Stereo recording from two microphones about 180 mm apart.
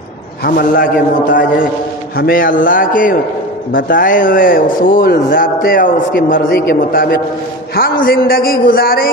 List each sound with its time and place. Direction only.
0.6 s a man's voice: 50° left (ahead or behind)